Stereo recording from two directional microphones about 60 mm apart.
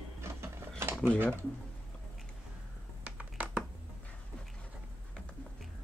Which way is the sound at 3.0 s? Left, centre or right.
Right.